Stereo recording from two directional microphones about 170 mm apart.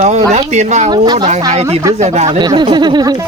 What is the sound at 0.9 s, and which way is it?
Speech, 25° right (ahead or behind).